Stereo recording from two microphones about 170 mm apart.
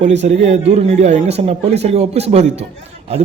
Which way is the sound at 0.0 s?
45° right (ahead or behind).